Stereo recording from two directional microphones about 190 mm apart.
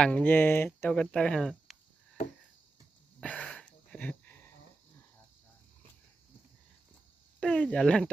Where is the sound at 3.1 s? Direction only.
5° left (ahead or behind).